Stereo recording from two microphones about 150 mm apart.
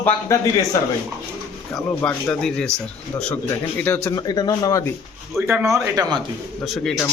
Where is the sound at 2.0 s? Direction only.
5° left (ahead or behind); by 4.9 s 20° left (ahead or behind).